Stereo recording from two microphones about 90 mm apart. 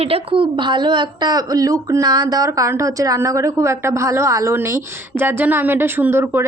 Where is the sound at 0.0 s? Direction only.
90° right; by 2.5 s 45° right (ahead or behind).